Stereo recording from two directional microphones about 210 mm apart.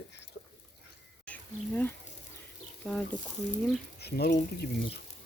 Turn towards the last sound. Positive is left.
turn(degrees=45)  # may be behind; listen again after turning